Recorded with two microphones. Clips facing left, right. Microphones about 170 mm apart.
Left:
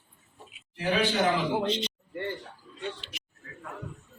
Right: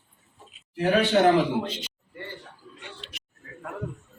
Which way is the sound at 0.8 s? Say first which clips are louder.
Right 6 dB; 60° right (ahead or behind).